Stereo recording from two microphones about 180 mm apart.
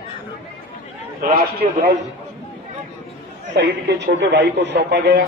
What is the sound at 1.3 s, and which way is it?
Speech, 55° right (ahead or behind).